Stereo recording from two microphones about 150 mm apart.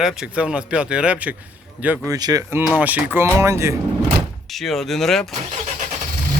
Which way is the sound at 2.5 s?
10° right (ahead or behind).